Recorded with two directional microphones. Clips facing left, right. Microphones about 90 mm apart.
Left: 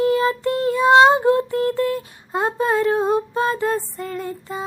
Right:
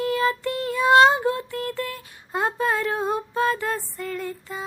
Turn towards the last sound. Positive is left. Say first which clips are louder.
# left 3 dB
turn(degrees=20)  # may be behind; listen again after turning